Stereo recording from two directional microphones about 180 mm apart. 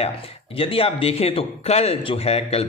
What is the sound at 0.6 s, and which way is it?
Speech, 30° left (ahead or behind).